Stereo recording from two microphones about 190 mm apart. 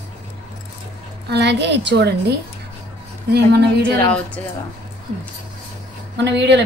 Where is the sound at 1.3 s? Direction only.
65° right (ahead or behind).